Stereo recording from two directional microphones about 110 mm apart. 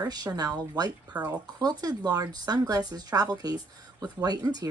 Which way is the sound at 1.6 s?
35° right (ahead or behind).